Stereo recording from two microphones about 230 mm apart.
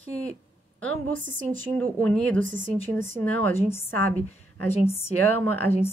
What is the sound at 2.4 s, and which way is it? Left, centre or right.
Speech, right.